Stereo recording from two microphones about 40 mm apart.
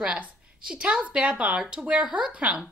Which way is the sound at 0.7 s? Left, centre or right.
Right.